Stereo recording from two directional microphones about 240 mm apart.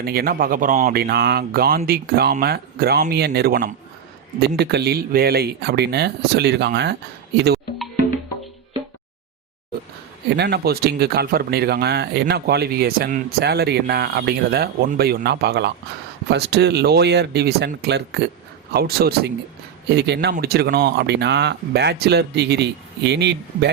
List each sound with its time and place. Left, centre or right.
0.0 s speech: right
10.2 s speech: right